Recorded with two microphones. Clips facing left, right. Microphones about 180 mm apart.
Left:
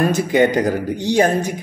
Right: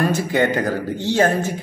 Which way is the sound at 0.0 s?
20° left (ahead or behind).